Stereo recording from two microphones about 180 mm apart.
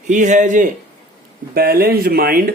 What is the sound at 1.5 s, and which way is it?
Speech, 55° right (ahead or behind).